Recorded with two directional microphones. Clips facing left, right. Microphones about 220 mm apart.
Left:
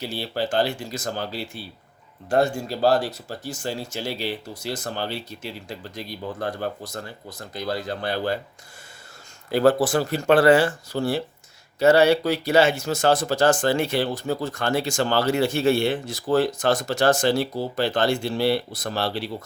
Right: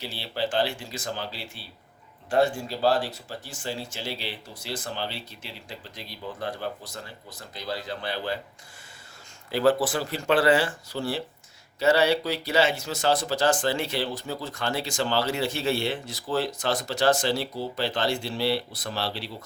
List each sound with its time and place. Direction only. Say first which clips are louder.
0.0 s speech: left 3 dB; 45° left (ahead or behind)
9.5 s speech: left 4 dB; 45° left (ahead or behind)